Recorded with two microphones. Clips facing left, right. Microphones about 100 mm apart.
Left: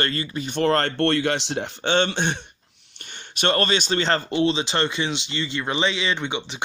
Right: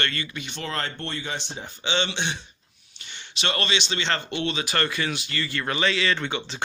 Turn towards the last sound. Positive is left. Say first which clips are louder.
# left 1 dB
turn(degrees=20)  # may be behind; listen again after turning